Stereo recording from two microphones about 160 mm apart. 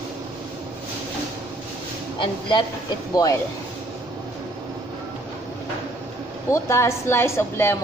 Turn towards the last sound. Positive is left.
turn(degrees=15)  # may be behind; listen again after turning